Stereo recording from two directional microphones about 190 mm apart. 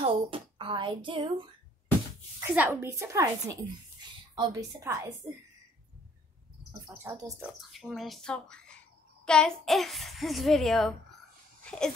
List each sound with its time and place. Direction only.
0.0 s speech: 25° right (ahead or behind)
2.5 s a woman's voice: 10° right (ahead or behind)
6.9 s a woman's voice: 15° right (ahead or behind)
7.7 s a child's voice: centre (ahead or behind)